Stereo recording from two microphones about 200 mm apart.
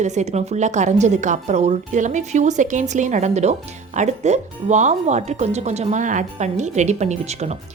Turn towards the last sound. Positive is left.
turn(degrees=-35)  # may be behind; listen again after turning